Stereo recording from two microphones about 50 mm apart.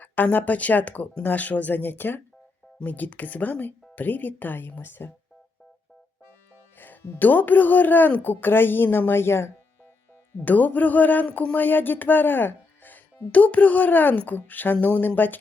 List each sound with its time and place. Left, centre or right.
0.0 s speech: left
6.7 s speech: left
10.4 s speech: left
13.3 s speech: left